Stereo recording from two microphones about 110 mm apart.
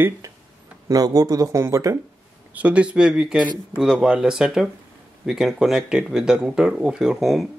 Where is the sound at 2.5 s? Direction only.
10° right (ahead or behind).